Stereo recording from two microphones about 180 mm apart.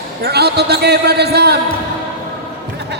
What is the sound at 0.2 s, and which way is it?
A man's voice, 65° right (ahead or behind).